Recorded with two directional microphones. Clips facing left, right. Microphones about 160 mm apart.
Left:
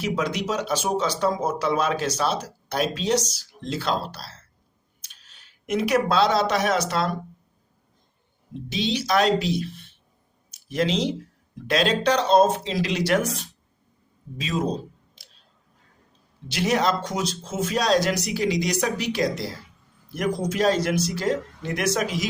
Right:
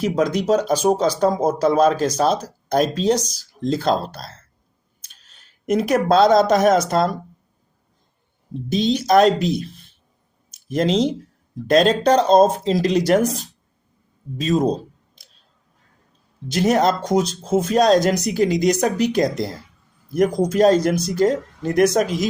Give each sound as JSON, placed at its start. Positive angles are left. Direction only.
{"t": 0.0, "sound": "speech", "side_deg": -40}
{"t": 8.5, "sound": "speech", "side_deg": -45}
{"t": 10.5, "sound": "a sound", "side_deg": -45}
{"t": 11.7, "sound": "speech", "side_deg": -45}
{"t": 16.5, "sound": "speech", "side_deg": -45}